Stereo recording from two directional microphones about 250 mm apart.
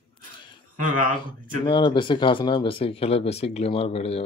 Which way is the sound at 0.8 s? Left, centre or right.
Right.